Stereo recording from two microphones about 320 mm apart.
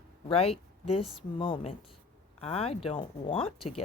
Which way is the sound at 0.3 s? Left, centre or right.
Centre.